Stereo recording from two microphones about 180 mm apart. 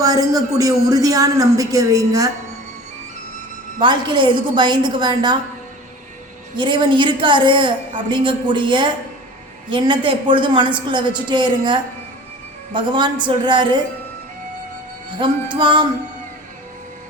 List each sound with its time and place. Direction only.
0.0 s a man's voice: 20° right (ahead or behind)
3.8 s a man's voice: 25° right (ahead or behind)
6.6 s a man's voice: 25° right (ahead or behind)
15.2 s a man's voice: 25° right (ahead or behind)